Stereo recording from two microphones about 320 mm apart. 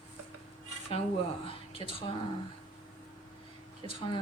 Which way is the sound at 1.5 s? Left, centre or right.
Centre.